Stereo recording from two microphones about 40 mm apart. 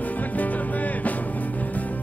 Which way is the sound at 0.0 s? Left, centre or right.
Left.